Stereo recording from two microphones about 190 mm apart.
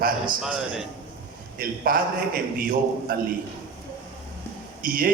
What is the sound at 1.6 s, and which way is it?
A man's voice, 50° right (ahead or behind).